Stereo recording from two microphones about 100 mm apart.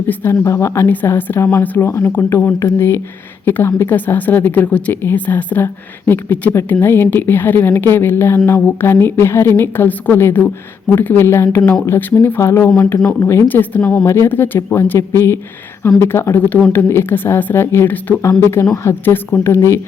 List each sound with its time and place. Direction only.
0.1 s a woman's voice: 25° left (ahead or behind)
13.5 s speech: 15° left (ahead or behind)
14.0 s a woman's voice: 25° left (ahead or behind)